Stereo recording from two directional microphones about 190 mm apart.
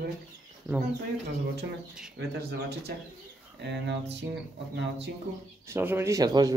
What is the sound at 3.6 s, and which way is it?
Speech, 65° right (ahead or behind).